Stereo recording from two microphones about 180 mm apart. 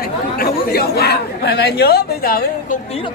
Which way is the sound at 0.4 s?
60° left (ahead or behind).